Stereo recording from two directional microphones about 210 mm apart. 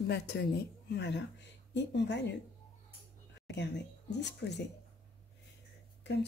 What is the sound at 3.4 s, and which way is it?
Speech, 55° left (ahead or behind).